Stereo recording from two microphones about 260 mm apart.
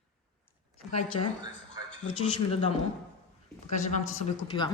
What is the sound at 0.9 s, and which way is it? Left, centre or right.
Speech, left.